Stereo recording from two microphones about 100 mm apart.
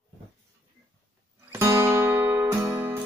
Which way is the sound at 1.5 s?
25° right (ahead or behind).